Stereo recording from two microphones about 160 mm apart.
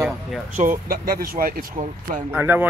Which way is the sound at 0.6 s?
60° right (ahead or behind).